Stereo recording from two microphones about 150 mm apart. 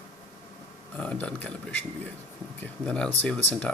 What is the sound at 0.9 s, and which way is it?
Speech, 10° left (ahead or behind).